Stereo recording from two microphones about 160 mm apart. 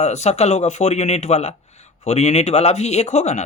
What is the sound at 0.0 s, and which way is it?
Speech, 45° left (ahead or behind).